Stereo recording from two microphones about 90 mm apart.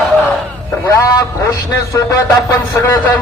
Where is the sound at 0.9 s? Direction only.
40° left (ahead or behind).